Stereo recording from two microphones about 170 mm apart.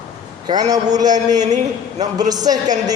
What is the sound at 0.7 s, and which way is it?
Speech, 20° right (ahead or behind).